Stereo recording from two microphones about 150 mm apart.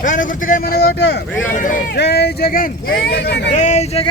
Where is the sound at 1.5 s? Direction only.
60° left (ahead or behind); by 3.3 s 90° left.